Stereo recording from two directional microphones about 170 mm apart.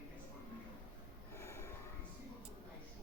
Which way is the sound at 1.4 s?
15° left (ahead or behind).